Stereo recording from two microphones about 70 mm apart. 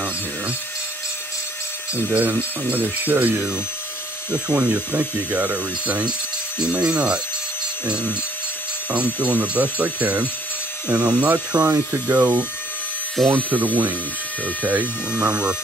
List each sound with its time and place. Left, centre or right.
2.0 s speech: right